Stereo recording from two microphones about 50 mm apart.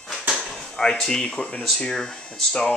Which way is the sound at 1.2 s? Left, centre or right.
Left.